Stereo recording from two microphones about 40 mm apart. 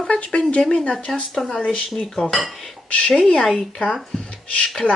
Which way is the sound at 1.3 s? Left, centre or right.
Centre.